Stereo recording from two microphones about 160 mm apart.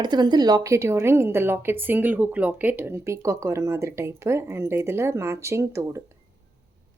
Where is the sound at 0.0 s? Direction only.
25° right (ahead or behind).